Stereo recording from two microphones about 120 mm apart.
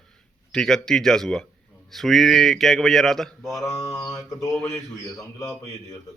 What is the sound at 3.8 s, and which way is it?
Mantra, 30° left (ahead or behind).